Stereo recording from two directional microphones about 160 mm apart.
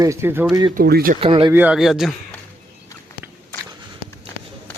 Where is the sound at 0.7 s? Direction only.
70° right (ahead or behind).